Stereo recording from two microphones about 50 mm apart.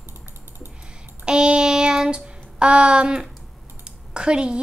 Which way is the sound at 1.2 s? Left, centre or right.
Centre.